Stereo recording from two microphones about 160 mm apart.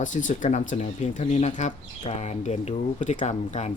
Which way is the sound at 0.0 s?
50° left (ahead or behind).